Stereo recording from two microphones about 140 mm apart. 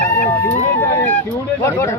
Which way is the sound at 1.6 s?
20° left (ahead or behind).